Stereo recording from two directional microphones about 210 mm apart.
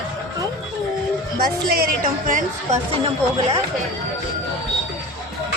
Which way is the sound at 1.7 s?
45° right (ahead or behind).